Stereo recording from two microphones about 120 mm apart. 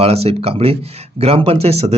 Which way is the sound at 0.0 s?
55° right (ahead or behind).